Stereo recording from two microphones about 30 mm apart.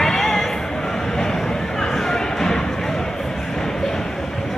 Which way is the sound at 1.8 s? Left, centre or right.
Centre.